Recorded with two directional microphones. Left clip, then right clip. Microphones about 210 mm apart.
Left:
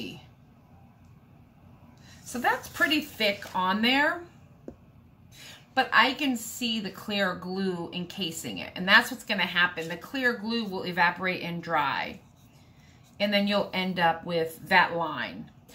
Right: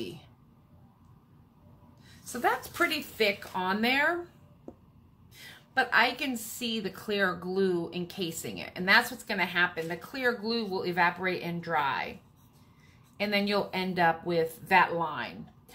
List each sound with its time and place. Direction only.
2.3 s a woman's voice: 30° right (ahead or behind)
5.3 s a woman's voice: 30° right (ahead or behind)
13.2 s speech: 30° right (ahead or behind)